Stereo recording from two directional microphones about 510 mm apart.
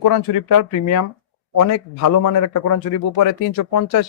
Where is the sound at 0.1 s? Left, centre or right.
Left.